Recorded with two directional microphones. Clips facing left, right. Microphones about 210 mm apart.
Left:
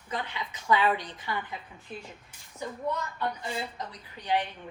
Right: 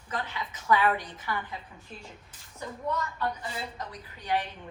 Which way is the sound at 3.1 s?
15° left (ahead or behind).